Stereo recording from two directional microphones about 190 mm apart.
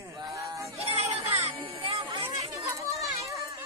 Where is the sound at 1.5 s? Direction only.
30° right (ahead or behind).